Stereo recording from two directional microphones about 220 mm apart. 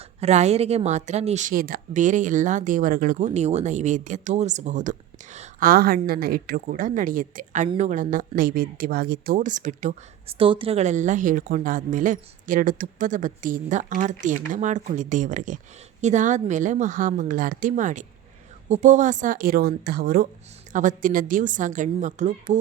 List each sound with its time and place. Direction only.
0.0 s speech: 30° right (ahead or behind)